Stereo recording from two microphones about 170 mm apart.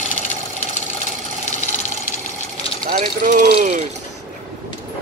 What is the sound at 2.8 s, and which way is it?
Speech, 45° right (ahead or behind).